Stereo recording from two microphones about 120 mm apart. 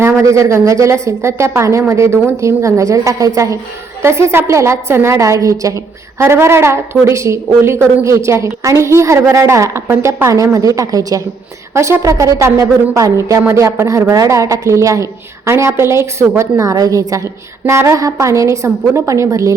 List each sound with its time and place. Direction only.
0.0 s a woman's voice: 25° right (ahead or behind)